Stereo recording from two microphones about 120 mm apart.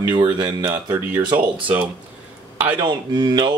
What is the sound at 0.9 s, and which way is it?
Speech, 15° right (ahead or behind).